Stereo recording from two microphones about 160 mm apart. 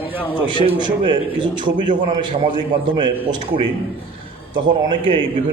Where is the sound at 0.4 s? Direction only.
30° right (ahead or behind).